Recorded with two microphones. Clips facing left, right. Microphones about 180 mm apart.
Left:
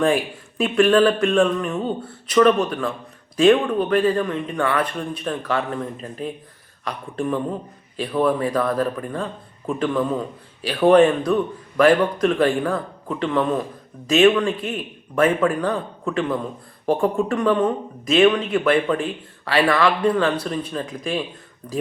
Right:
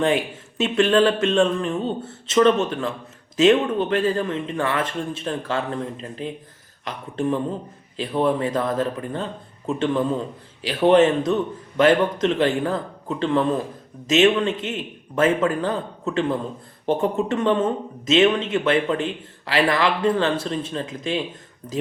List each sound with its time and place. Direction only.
0.6 s a man's voice: 25° right (ahead or behind)